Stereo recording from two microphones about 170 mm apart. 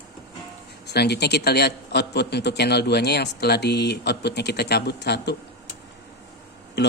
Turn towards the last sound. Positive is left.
turn(degrees=85)